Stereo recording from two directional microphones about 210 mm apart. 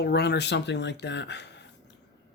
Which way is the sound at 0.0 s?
50° left (ahead or behind).